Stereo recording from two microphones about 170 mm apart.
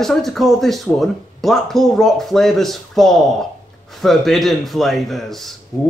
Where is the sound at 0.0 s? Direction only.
Centre (ahead or behind).